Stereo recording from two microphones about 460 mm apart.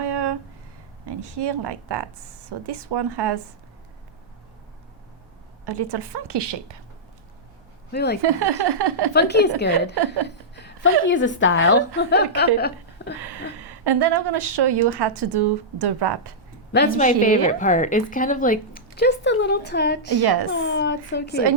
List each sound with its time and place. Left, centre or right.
0.0 s a sound: right
1.0 s a woman's voice: right
5.6 s a woman's voice: right
7.9 s speech: left
8.2 s a woman's voice: right
9.1 s a woman's voice: left
13.2 s a woman's voice: right
16.7 s a woman's voice: centre
20.2 s speech: right
20.5 s speech: left